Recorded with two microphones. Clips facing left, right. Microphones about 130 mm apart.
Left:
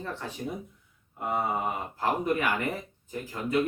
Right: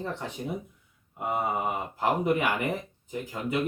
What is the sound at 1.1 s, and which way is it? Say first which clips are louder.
Speech: even; 15° right (ahead or behind).